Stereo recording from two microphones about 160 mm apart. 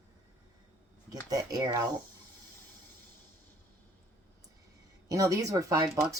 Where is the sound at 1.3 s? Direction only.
25° right (ahead or behind).